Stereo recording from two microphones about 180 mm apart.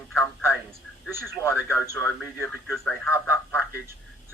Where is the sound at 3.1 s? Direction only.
15° left (ahead or behind).